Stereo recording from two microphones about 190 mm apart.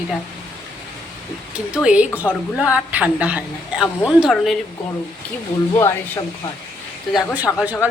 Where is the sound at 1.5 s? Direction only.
5° right (ahead or behind).